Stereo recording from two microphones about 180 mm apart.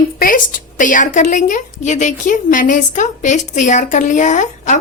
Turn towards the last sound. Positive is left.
turn(degrees=40)  # may be behind; listen again after turning